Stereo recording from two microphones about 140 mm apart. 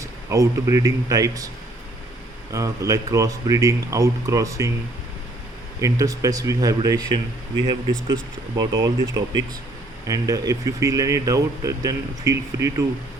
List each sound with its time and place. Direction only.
0.0 s speech: 20° right (ahead or behind)
2.5 s speech: 25° right (ahead or behind)
5.8 s speech: 25° right (ahead or behind)
8.5 s speech: 25° right (ahead or behind)